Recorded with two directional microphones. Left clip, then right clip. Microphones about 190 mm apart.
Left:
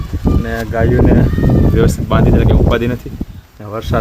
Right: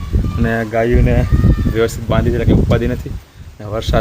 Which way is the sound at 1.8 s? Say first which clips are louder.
Right 3 dB; 10° left (ahead or behind).